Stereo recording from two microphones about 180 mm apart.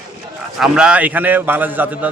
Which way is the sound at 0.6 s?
5° right (ahead or behind).